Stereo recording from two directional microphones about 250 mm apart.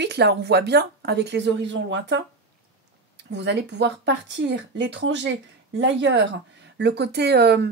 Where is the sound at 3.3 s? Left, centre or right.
Right.